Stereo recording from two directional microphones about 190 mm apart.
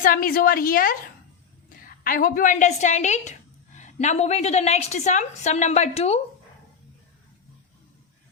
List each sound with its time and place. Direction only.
0.0 s a woman's voice: 50° left (ahead or behind)
2.0 s a woman's voice: 50° left (ahead or behind); by 6.1 s 35° left (ahead or behind)